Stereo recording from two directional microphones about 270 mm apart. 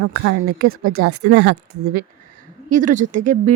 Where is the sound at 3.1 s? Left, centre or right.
Right.